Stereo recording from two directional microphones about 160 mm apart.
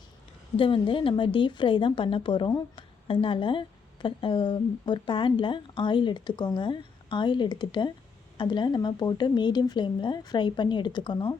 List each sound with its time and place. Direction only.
0.6 s a woman's voice: 35° left (ahead or behind)